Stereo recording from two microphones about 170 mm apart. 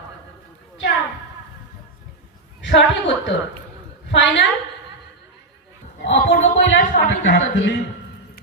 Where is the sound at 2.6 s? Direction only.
90° left.